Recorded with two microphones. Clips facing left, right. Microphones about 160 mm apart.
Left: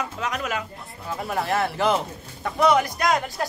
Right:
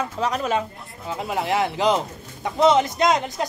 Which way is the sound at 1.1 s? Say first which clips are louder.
Right 1 dB; 20° right (ahead or behind).